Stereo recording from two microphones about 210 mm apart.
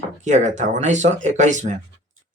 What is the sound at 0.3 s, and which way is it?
Speech, 35° right (ahead or behind).